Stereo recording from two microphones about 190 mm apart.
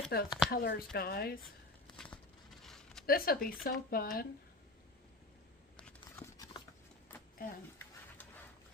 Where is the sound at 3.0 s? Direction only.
50° left (ahead or behind).